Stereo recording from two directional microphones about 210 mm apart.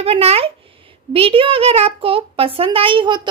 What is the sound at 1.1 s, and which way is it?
A child's voice, 25° right (ahead or behind).